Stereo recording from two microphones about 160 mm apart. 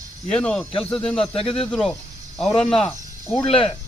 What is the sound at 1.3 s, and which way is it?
Speech, 35° left (ahead or behind).